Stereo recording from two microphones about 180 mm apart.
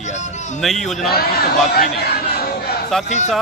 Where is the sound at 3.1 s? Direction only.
40° left (ahead or behind).